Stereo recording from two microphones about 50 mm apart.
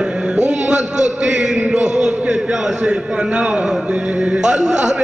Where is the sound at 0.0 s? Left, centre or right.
Right.